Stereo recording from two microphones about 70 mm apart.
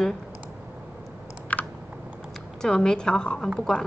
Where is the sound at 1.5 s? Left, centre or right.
Left.